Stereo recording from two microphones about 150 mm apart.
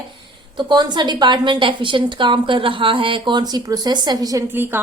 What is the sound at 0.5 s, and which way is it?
A woman's voice, 30° right (ahead or behind).